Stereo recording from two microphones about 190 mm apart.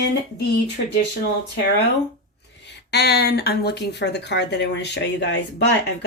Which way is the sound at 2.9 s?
55° left (ahead or behind).